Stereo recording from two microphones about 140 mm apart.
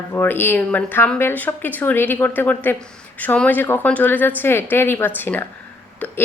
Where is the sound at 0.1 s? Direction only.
15° left (ahead or behind).